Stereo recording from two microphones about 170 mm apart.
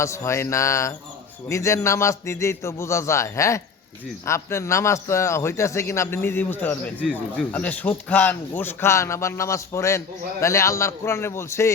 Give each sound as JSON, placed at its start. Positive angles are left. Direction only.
{"t": 0.0, "sound": "a man's voice", "side_deg": 15}